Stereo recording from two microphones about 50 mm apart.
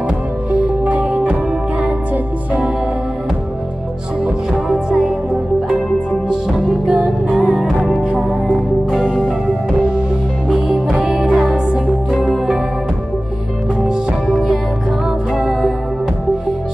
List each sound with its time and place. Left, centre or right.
0.5 s music: right
4.2 s music: centre
6.9 s music: centre
10.5 s music: centre
13.8 s music: centre